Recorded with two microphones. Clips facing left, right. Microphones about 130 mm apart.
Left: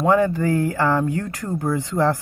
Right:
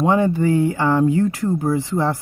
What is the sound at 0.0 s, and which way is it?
Speech, 20° right (ahead or behind).